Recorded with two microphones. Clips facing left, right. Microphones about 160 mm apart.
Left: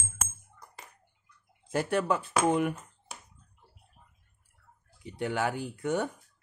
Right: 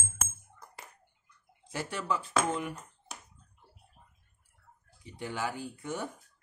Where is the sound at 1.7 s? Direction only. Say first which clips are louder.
Left 7 dB; 55° left (ahead or behind).